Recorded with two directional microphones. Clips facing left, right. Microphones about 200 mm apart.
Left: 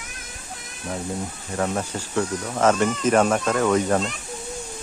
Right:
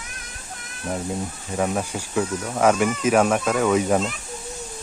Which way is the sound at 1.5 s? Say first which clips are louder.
Right 1 dB; 10° right (ahead or behind).